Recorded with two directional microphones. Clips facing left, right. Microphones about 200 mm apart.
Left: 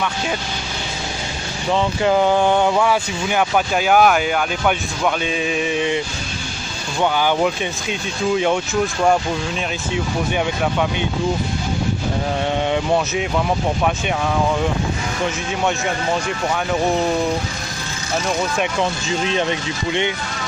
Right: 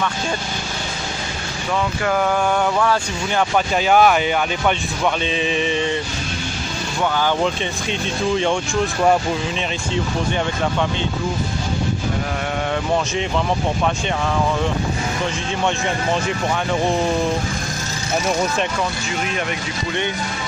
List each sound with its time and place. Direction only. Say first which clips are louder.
1.7 s speech: left 4 dB; 25° left (ahead or behind)
7.0 s speech: left 2 dB; 15° left (ahead or behind)
18.8 s speech: left 3 dB; 25° left (ahead or behind)